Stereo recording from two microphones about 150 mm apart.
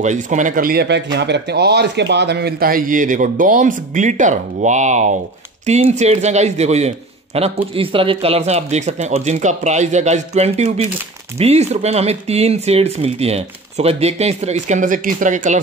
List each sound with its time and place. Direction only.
0.0 s a man's voice: 55° right (ahead or behind); by 0.8 s 70° right (ahead or behind)
1.5 s a man's voice: 90° right; by 15.6 s 55° right (ahead or behind)